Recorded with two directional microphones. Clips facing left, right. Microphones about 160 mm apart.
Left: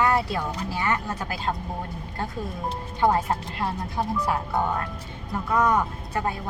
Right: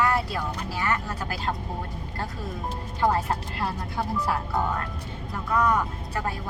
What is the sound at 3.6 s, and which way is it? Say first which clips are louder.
Speech: left 2 dB; 20° left (ahead or behind).